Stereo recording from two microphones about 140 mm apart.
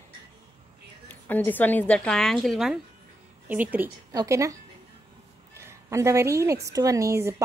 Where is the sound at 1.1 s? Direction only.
10° left (ahead or behind).